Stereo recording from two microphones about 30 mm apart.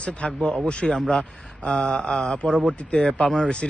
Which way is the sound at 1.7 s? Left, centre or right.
Left.